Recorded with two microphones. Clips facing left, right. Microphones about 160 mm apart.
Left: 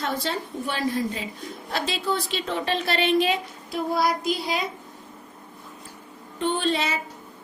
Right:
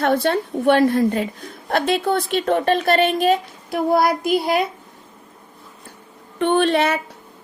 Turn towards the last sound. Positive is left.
turn(degrees=-60)  # may be behind; listen again after turning